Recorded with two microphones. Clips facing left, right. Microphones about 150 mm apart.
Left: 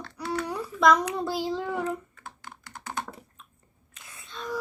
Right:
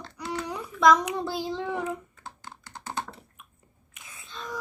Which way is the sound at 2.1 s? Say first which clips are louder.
Right 1 dB; 30° right (ahead or behind).